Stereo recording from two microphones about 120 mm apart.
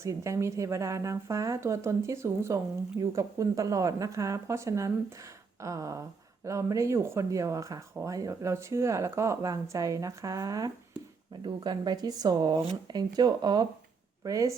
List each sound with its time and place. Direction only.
0.0 s speech: 25° right (ahead or behind)